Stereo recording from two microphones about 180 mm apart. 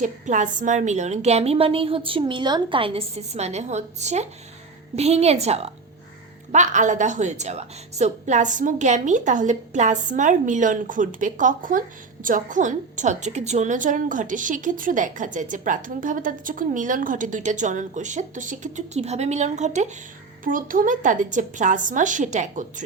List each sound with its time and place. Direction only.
0.0 s a woman's voice: 45° right (ahead or behind)